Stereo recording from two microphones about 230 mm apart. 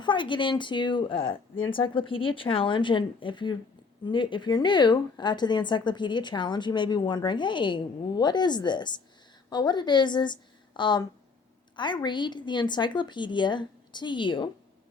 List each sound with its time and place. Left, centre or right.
0.0 s a woman's voice: left